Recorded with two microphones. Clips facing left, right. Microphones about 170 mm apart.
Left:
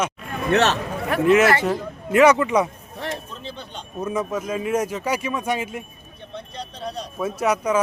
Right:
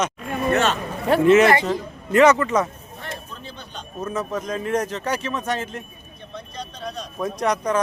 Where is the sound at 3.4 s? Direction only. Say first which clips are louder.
Left 2 dB; 25° left (ahead or behind).